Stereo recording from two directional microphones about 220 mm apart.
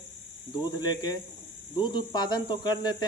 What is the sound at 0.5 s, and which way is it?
Speech, 20° left (ahead or behind).